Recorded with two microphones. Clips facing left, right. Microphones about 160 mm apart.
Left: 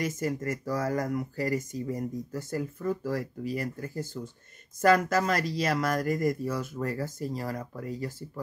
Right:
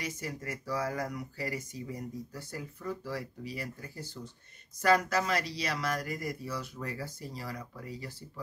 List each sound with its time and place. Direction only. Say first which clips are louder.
0.0 s speech: left 9 dB; 45° left (ahead or behind)